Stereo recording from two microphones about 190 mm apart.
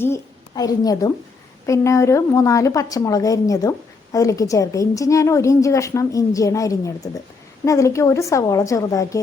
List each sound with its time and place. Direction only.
0.0 s a woman's voice: 15° left (ahead or behind)